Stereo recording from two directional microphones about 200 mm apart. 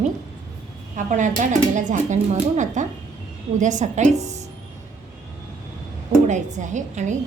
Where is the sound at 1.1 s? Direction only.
40° right (ahead or behind).